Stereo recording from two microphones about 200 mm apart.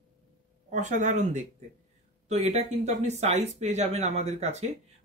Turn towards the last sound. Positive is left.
turn(degrees=-35)  # may be behind; listen again after turning